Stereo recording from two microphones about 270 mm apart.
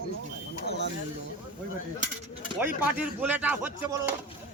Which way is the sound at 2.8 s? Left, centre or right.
Centre.